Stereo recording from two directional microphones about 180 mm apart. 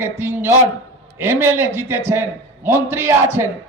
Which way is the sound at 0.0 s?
15° right (ahead or behind).